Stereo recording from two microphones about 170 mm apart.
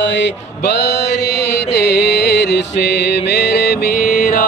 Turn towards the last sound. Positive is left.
turn(degrees=60)  # may be behind; listen again after turning